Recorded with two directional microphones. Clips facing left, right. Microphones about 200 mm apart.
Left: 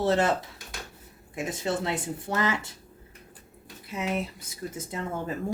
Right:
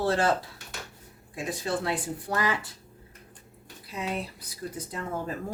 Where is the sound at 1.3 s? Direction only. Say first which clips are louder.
Left 1 dB; 25° left (ahead or behind).